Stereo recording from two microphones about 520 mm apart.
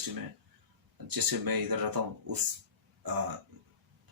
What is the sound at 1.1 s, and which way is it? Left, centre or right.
Speech, right.